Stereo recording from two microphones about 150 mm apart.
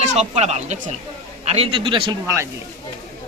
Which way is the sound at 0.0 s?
45° right (ahead or behind).